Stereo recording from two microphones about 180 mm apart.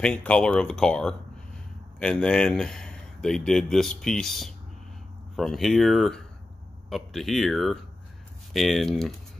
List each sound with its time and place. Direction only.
0.0 s speech: 5° left (ahead or behind)